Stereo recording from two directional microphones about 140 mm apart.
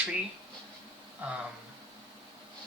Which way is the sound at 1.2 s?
10° right (ahead or behind).